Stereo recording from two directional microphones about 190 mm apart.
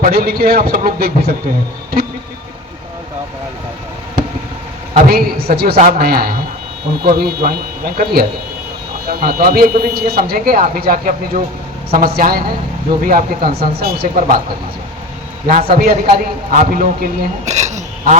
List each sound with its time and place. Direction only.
0.0 s speech: 50° right (ahead or behind)
5.0 s a woman's voice: 55° right (ahead or behind)
5.7 s speech: 45° right (ahead or behind)
15.4 s a man's voice: 50° right (ahead or behind)